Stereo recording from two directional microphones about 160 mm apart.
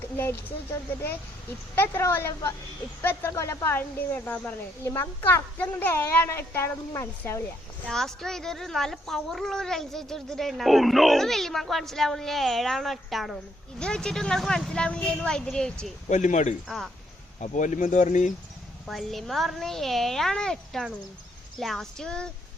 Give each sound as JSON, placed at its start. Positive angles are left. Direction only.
{"t": 0.2, "sound": "speech", "side_deg": 15}
{"t": 7.9, "sound": "a woman's voice", "side_deg": 5}
{"t": 16.0, "sound": "speech", "side_deg": 50}
{"t": 16.6, "sound": "a woman's voice", "side_deg": 0}
{"t": 17.4, "sound": "speech", "side_deg": 50}
{"t": 18.9, "sound": "a woman's voice", "side_deg": 0}